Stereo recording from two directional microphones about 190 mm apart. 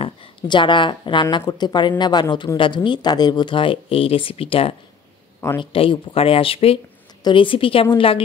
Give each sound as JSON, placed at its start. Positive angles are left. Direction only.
{"t": 0.0, "sound": "speech", "side_deg": 25}